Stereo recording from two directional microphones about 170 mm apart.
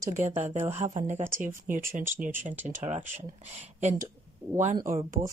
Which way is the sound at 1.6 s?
55° right (ahead or behind).